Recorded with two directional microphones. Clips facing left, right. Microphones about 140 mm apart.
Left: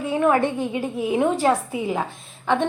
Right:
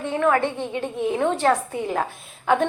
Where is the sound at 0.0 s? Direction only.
10° left (ahead or behind).